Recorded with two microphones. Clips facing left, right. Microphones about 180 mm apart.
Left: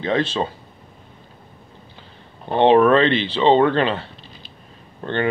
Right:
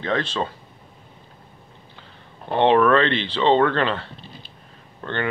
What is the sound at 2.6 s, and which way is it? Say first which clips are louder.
Speech: left 3 dB; 25° left (ahead or behind).